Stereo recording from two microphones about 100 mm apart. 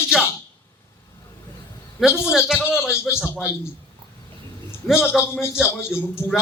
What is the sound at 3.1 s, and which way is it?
Speech, centre (ahead or behind).